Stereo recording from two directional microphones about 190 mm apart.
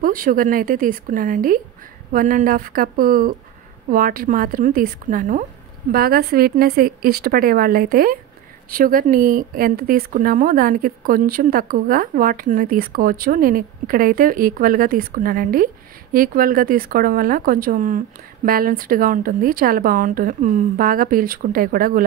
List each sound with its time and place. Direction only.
0.0 s a woman's voice: 45° right (ahead or behind)
5.9 s a woman's voice: 55° right (ahead or behind)